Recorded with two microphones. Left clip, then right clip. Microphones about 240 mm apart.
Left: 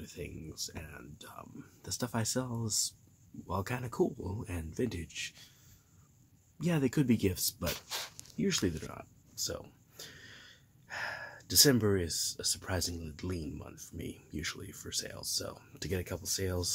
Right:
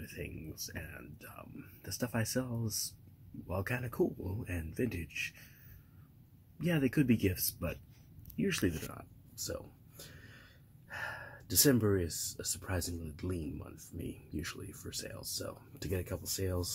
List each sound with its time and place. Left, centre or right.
0.0 s speech: centre
6.6 s speech: centre